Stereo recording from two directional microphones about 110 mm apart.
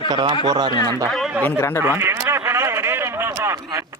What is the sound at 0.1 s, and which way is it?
Speech, 45° right (ahead or behind).